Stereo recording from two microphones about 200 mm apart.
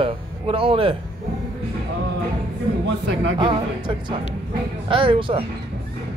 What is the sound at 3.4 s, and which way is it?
Speech, 25° right (ahead or behind).